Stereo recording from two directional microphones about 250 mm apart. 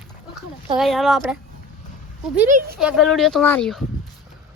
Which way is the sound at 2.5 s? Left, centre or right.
Right.